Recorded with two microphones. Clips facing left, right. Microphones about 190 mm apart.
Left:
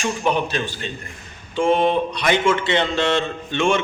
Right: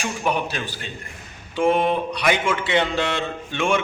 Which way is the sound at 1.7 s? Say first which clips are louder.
Left 2 dB; 10° right (ahead or behind).